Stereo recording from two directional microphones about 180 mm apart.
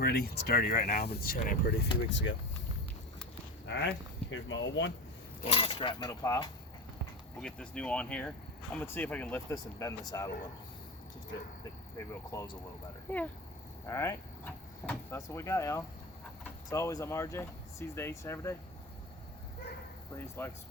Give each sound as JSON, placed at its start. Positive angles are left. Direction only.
{"t": 0.0, "sound": "speech", "side_deg": 60}
{"t": 2.0, "sound": "speech", "side_deg": 90}
{"t": 3.7, "sound": "a sound", "side_deg": 90}
{"t": 4.3, "sound": "speech", "side_deg": 90}
{"t": 5.4, "sound": "speech", "side_deg": 30}
{"t": 7.4, "sound": "speech", "side_deg": 5}
{"t": 11.9, "sound": "speech", "side_deg": 20}
{"t": 20.1, "sound": "speech", "side_deg": 15}